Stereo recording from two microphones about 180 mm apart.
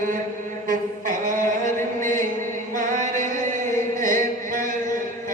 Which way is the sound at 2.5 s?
45° right (ahead or behind).